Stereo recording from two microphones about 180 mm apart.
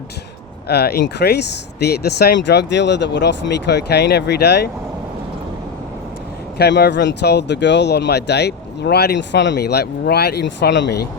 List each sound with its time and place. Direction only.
0.7 s speech: 60° left (ahead or behind)
6.6 s speech: 65° left (ahead or behind)